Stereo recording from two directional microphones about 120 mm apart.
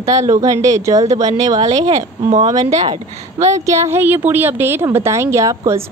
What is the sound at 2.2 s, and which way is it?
Speech, 80° right.